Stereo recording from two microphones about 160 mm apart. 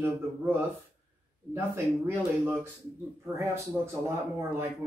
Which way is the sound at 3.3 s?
15° right (ahead or behind).